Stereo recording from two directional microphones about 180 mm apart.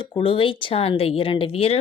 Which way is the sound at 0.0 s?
30° left (ahead or behind).